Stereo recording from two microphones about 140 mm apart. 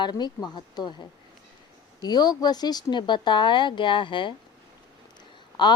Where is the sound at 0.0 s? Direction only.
30° left (ahead or behind).